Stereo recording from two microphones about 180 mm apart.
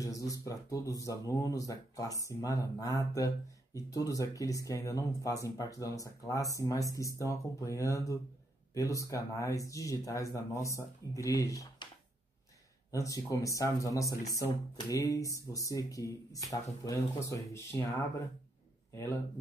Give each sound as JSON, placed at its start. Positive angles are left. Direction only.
{"t": 0.0, "sound": "speech", "side_deg": 20}
{"t": 12.9, "sound": "speech", "side_deg": 20}